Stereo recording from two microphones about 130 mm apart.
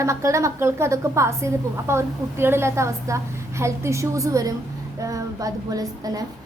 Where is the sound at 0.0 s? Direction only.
25° right (ahead or behind).